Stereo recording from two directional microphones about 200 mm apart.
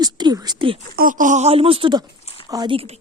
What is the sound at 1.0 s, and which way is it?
Speech, 40° right (ahead or behind).